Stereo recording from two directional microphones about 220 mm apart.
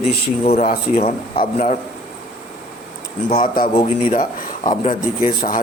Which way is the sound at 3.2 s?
35° left (ahead or behind).